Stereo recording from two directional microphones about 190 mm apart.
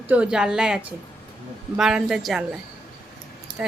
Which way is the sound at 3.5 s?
5° right (ahead or behind).